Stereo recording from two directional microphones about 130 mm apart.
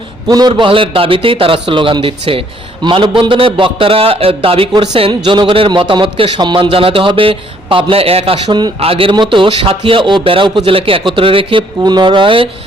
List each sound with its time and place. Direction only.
0.3 s a man's voice: 30° right (ahead or behind); by 8.4 s 45° right (ahead or behind)
8.4 s speech: 30° right (ahead or behind)
8.8 s a man's voice: 45° right (ahead or behind)